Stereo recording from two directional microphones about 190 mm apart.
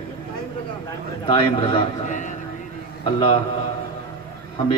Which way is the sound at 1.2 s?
25° left (ahead or behind).